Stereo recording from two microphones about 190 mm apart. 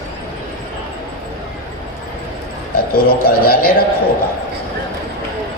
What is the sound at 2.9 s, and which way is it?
Speech, 50° left (ahead or behind).